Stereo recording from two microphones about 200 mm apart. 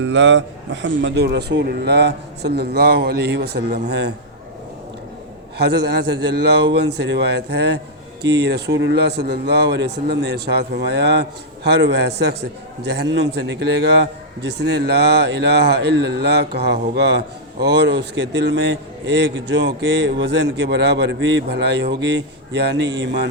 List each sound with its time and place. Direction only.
0.0 s speech: 65° right (ahead or behind)
5.5 s speech: 55° right (ahead or behind)